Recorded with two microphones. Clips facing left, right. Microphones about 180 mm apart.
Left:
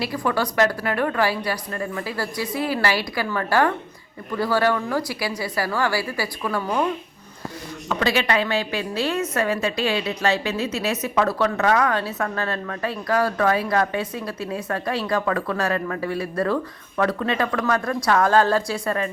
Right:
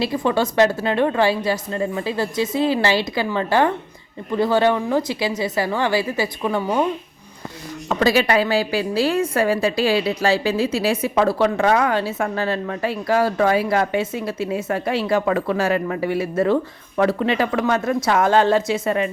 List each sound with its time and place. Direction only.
0.0 s a woman's voice: 25° right (ahead or behind)
7.9 s a woman's voice: 40° right (ahead or behind); by 19.1 s 20° right (ahead or behind)